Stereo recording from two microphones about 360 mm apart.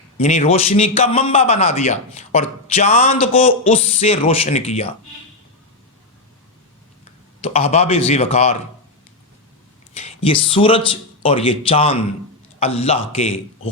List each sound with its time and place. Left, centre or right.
0.2 s a man's voice: centre
7.4 s a man's voice: centre
9.9 s a man's voice: centre